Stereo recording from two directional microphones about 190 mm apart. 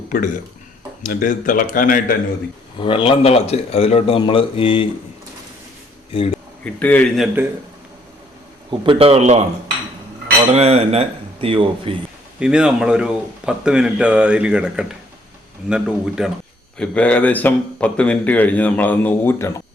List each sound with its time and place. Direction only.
1.0 s a man's voice: 45° left (ahead or behind)
2.8 s a man's voice: 30° left (ahead or behind)
6.1 s a man's voice: 30° left (ahead or behind)
6.7 s speech: 5° left (ahead or behind)
8.8 s dishes: 30° right (ahead or behind)
10.5 s dishes: 35° right (ahead or behind)
12.4 s speech: 5° right (ahead or behind); by 19.6 s 15° left (ahead or behind)